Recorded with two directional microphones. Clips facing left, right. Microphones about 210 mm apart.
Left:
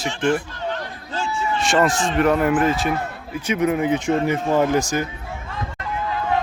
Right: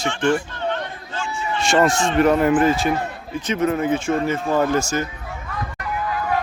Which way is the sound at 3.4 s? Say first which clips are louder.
Left 1 dB; 10° left (ahead or behind).